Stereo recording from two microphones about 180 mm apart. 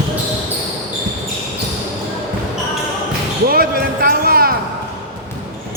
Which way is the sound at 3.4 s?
55° right (ahead or behind).